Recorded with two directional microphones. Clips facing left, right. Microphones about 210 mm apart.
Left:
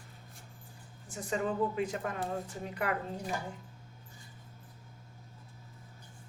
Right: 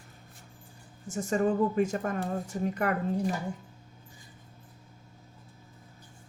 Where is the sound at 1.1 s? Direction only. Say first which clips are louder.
Right 7 dB; 45° right (ahead or behind).